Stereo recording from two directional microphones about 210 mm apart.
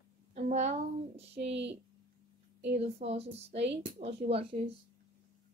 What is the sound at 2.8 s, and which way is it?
Speech, 30° right (ahead or behind).